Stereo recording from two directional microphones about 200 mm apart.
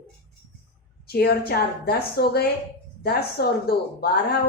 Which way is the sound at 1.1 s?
50° left (ahead or behind).